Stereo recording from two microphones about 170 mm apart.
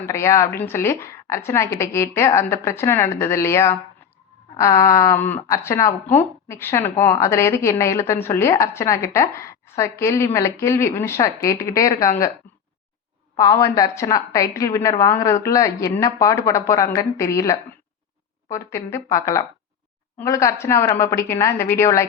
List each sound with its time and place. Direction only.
0.0 s a woman's voice: 15° left (ahead or behind)
13.3 s a woman's voice: 20° left (ahead or behind)